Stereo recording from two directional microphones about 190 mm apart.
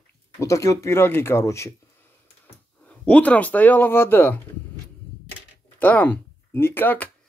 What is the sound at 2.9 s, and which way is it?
Speech, 5° left (ahead or behind).